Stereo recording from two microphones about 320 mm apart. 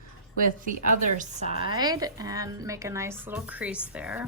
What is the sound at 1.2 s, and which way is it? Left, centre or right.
Speech, centre.